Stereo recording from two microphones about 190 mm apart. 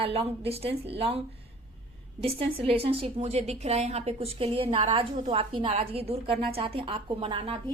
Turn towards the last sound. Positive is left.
turn(degrees=-25)  # may be behind; listen again after turning